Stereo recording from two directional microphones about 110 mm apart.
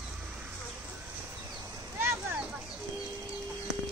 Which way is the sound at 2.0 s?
20° right (ahead or behind).